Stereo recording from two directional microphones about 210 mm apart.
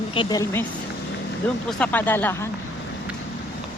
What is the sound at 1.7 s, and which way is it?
Speech, 5° left (ahead or behind).